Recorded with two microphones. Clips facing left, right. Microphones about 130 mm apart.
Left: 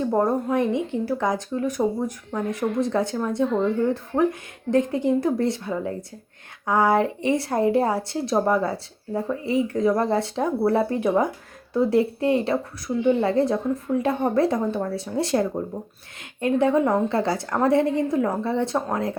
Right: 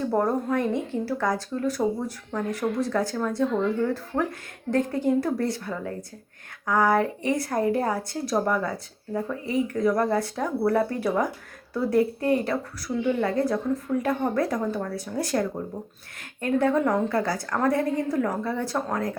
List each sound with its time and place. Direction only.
0.1 s speech: 15° left (ahead or behind)